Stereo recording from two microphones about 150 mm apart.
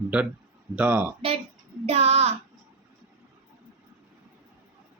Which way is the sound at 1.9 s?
45° right (ahead or behind).